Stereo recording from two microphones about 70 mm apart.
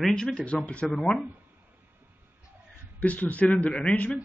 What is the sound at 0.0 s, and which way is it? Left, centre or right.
Speech, centre.